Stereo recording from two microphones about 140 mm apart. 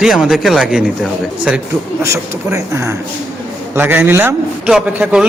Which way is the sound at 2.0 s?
20° right (ahead or behind).